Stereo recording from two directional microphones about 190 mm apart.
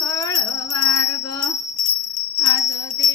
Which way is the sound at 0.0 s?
20° left (ahead or behind).